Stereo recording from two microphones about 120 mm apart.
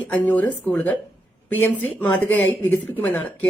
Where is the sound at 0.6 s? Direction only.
10° left (ahead or behind).